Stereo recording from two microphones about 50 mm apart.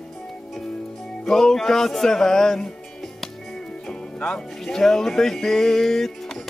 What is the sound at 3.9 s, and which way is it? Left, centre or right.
Speech, centre.